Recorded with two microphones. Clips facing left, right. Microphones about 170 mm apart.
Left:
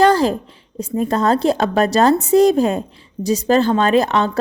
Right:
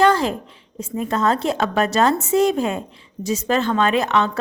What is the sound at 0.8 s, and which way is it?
A woman's voice, 35° left (ahead or behind).